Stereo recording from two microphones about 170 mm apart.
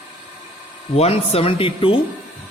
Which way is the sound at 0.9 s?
35° left (ahead or behind).